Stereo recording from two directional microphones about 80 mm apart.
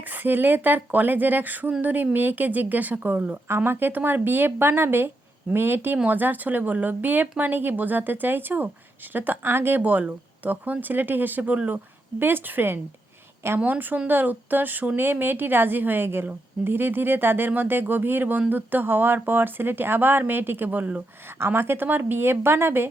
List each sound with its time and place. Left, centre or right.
0.0 s a woman's voice: right